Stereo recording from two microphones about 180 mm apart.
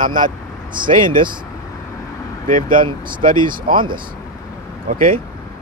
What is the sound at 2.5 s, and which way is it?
Speech, 50° right (ahead or behind).